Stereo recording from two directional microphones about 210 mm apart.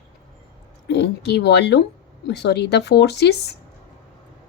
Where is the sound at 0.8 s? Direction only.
55° left (ahead or behind).